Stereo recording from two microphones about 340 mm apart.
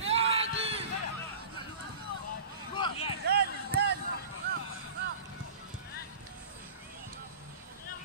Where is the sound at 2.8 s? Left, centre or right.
Centre.